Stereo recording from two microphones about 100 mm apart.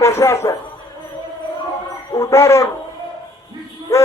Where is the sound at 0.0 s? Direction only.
30° left (ahead or behind).